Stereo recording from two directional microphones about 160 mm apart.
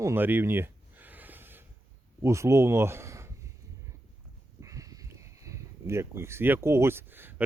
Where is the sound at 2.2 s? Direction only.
20° right (ahead or behind).